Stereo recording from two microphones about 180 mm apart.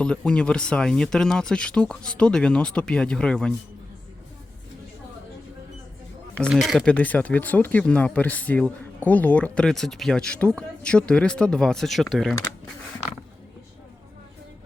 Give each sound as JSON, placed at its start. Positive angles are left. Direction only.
{"t": 0.0, "sound": "speech", "side_deg": 5}
{"t": 6.3, "sound": "speech", "side_deg": 5}